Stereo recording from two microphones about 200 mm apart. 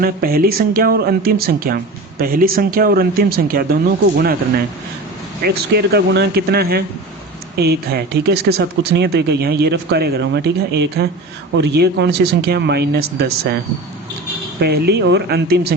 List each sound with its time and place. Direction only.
0.0 s speech: 50° right (ahead or behind)
5.5 s speech: 55° right (ahead or behind)
14.6 s speech: 55° right (ahead or behind)